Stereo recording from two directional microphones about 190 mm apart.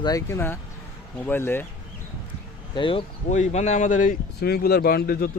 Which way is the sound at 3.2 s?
40° left (ahead or behind).